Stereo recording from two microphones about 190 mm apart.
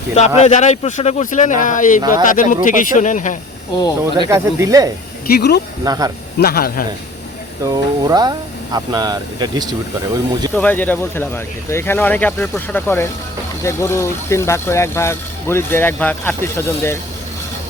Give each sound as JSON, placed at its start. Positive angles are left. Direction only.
{"t": 0.1, "sound": "a man's voice", "side_deg": 35}
{"t": 2.0, "sound": "speech", "side_deg": -20}
{"t": 2.2, "sound": "speech", "side_deg": 45}
{"t": 3.8, "sound": "speech", "side_deg": 20}
{"t": 4.3, "sound": "speech", "side_deg": -15}
{"t": 5.3, "sound": "speech", "side_deg": 60}
{"t": 5.8, "sound": "speech", "side_deg": -20}
{"t": 6.4, "sound": "speech", "side_deg": 50}
{"t": 7.6, "sound": "speech", "side_deg": -20}
{"t": 10.5, "sound": "speech", "side_deg": 10}